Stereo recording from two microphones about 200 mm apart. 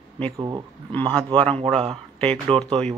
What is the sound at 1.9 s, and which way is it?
Speech, 5° left (ahead or behind).